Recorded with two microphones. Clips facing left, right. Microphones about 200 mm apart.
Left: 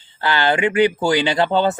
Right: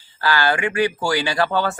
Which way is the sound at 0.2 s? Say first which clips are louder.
Left 2 dB; 20° left (ahead or behind).